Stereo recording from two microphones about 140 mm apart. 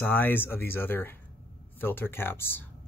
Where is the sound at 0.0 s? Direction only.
15° left (ahead or behind).